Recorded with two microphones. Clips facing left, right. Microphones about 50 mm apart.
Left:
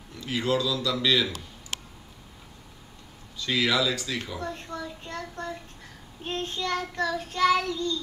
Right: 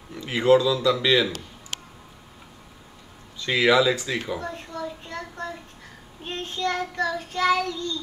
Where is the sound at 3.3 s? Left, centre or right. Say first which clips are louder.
Right 6 dB; right.